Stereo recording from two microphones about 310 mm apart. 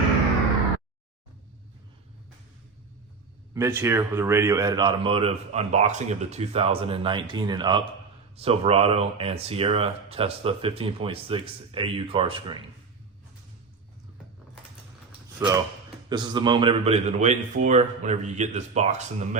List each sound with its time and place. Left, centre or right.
3.5 s speech: centre
15.4 s speech: centre